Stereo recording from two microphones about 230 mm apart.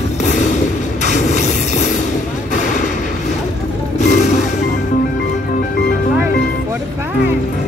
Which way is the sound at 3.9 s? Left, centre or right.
Left.